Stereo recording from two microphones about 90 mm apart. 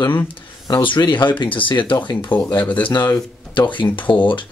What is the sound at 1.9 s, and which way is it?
Speech, 55° left (ahead or behind).